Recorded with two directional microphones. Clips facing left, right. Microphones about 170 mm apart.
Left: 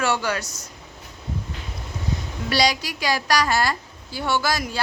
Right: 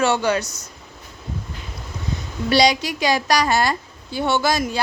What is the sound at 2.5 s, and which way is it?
A woman's voice, 20° right (ahead or behind).